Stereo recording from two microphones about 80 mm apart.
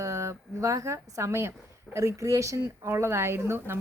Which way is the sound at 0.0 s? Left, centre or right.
Right.